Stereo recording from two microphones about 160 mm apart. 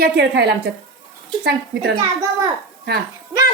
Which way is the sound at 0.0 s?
90° right.